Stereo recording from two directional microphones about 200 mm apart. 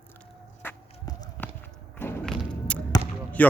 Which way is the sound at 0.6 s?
15° left (ahead or behind).